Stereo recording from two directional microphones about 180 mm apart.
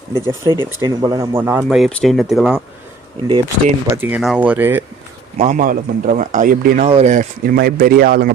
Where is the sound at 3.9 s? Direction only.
10° right (ahead or behind).